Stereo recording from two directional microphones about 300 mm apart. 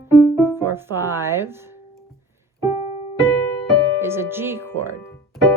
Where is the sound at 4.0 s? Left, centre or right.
Centre.